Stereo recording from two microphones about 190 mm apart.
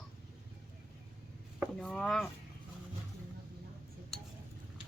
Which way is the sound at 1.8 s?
5° left (ahead or behind).